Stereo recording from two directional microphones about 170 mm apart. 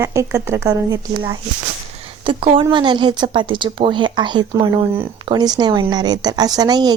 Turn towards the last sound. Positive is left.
turn(degrees=-25)  # may be behind; listen again after turning